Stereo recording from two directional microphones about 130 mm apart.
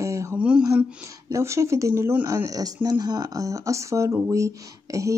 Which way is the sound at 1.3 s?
25° right (ahead or behind).